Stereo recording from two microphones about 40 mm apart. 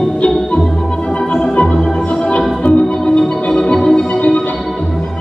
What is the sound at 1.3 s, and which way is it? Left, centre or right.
Music, left.